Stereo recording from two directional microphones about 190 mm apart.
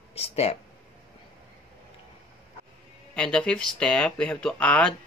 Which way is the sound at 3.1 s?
5° left (ahead or behind).